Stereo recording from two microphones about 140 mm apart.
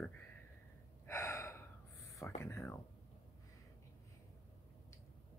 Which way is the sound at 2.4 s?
15° left (ahead or behind).